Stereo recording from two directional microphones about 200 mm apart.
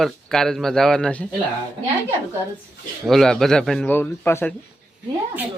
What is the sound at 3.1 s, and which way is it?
A man's voice, centre (ahead or behind).